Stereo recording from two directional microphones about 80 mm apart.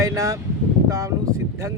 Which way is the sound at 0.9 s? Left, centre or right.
Right.